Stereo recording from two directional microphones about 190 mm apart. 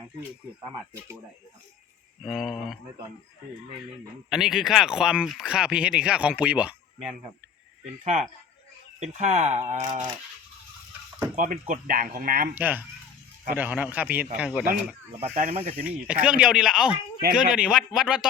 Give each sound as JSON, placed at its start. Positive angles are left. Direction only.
{"t": 2.2, "sound": "speech", "side_deg": 0}
{"t": 4.3, "sound": "speech", "side_deg": 0}
{"t": 8.0, "sound": "speech", "side_deg": -35}
{"t": 11.3, "sound": "speech", "side_deg": -40}
{"t": 12.5, "sound": "a man's voice", "side_deg": -10}
{"t": 15.2, "sound": "speech", "side_deg": -45}
{"t": 15.5, "sound": "speech", "side_deg": -30}
{"t": 15.8, "sound": "speech", "side_deg": -5}